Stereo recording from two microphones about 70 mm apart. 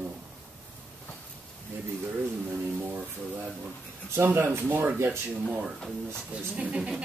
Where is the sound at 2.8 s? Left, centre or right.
Right.